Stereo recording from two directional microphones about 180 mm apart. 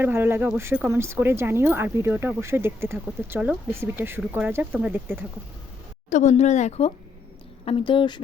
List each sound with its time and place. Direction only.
0.0 s speech: 10° right (ahead or behind)
6.1 s speech: 40° left (ahead or behind); by 8.2 s 25° left (ahead or behind)